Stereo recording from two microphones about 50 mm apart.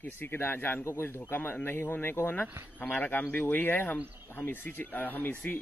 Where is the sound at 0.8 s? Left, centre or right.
Left.